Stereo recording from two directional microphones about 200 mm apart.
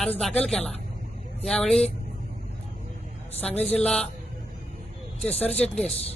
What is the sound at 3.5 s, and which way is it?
Speech, 30° left (ahead or behind).